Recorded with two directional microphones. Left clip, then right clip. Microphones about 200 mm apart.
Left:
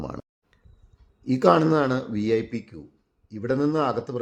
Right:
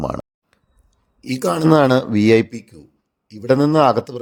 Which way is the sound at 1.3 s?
Centre (ahead or behind).